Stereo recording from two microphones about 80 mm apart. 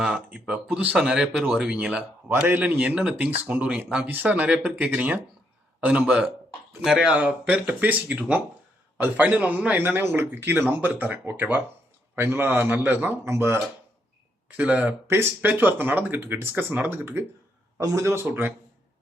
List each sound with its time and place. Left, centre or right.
0.0 s speech: centre; by 13.6 s right
14.4 s speech: centre
15.0 s speech: right
15.4 s speech: right
17.7 s speech: right
18.1 s speech: right